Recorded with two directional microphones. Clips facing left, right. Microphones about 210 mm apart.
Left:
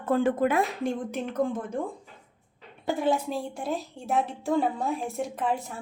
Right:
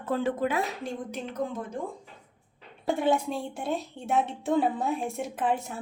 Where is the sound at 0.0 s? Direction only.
50° left (ahead or behind).